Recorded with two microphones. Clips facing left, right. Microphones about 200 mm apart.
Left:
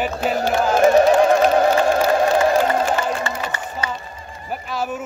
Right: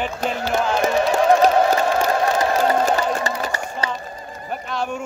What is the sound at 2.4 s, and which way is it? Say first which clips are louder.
Crowd: left 1 dB; 40° right (ahead or behind).